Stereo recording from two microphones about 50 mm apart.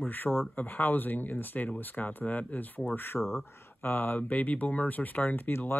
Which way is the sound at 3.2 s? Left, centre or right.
Centre.